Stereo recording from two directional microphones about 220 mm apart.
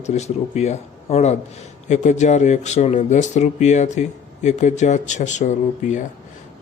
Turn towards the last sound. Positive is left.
turn(degrees=35)  # may be behind; listen again after turning